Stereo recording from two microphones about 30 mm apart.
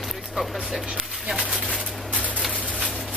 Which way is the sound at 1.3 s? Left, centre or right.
Right.